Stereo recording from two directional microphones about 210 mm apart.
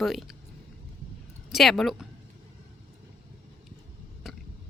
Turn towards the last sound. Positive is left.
turn(degrees=0)  # may be behind; listen again after turning